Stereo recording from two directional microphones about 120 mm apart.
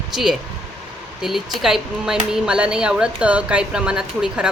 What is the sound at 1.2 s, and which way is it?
Speech, centre (ahead or behind).